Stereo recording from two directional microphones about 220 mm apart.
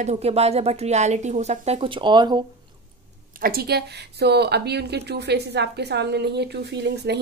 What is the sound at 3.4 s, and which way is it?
Speech, 45° right (ahead or behind).